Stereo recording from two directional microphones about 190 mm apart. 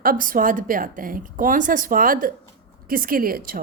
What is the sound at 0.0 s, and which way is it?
A woman's voice, 50° right (ahead or behind).